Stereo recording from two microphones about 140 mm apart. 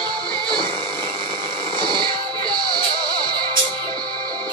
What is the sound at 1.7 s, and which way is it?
Music, 30° right (ahead or behind).